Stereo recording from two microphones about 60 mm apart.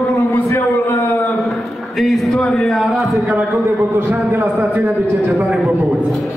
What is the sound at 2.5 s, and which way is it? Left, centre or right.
Speech, centre.